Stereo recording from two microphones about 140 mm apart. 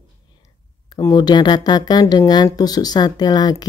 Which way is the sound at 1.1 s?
30° left (ahead or behind).